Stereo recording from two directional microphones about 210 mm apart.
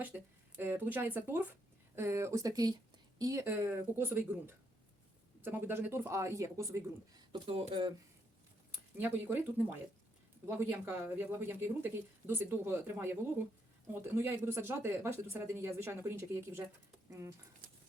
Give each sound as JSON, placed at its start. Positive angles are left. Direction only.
{"t": 0.0, "sound": "speech", "side_deg": -10}
{"t": 9.0, "sound": "speech", "side_deg": -10}